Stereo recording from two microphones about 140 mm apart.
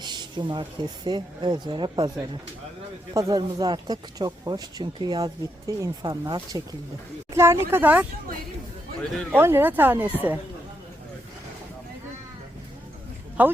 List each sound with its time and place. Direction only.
0.0 s speech: 30° right (ahead or behind)
7.3 s speech: 20° right (ahead or behind)
9.3 s speech: 15° right (ahead or behind)
13.4 s speech: 10° right (ahead or behind)